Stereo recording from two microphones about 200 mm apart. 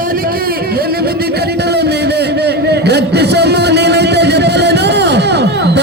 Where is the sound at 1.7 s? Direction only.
55° right (ahead or behind).